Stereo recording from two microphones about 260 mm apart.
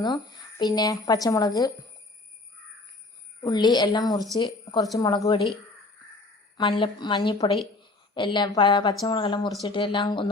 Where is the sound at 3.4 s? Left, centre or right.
Centre.